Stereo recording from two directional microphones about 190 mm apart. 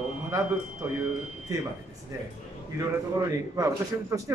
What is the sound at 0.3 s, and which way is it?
Speech, 15° right (ahead or behind).